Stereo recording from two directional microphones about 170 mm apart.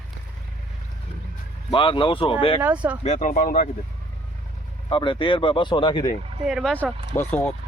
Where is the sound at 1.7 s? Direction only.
30° left (ahead or behind).